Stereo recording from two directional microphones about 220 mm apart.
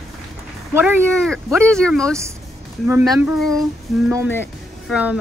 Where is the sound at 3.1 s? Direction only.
5° right (ahead or behind).